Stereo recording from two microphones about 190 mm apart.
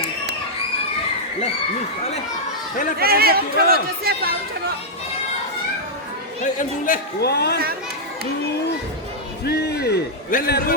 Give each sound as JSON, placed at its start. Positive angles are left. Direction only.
{"t": 3.0, "sound": "speech", "side_deg": -55}
{"t": 6.4, "sound": "a man's voice", "side_deg": 45}
{"t": 9.5, "sound": "a man's voice", "side_deg": 60}